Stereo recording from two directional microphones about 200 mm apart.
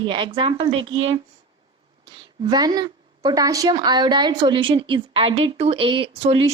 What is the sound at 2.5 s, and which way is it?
A woman's voice, 20° right (ahead or behind).